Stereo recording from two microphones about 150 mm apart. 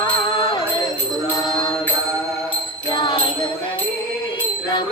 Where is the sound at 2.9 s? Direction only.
30° left (ahead or behind).